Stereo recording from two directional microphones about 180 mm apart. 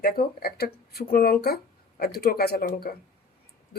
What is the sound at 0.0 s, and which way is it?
Speech, 55° left (ahead or behind).